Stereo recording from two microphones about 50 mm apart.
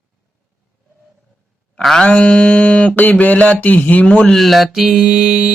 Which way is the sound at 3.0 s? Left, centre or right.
Left.